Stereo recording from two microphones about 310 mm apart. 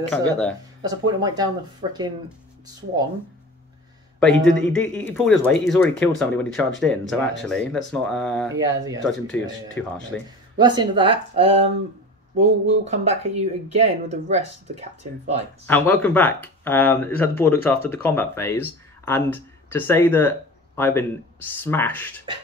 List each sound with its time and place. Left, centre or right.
0.1 s speech: centre
0.8 s speech: centre
4.2 s speech: centre
8.5 s speech: centre
9.0 s speech: centre
10.6 s speech: centre
15.6 s speech: centre